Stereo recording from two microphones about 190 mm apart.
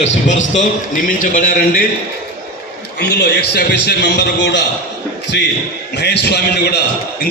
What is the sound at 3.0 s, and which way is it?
A man's voice, 60° left (ahead or behind).